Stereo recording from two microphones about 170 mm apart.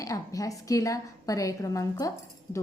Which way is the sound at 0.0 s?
20° left (ahead or behind).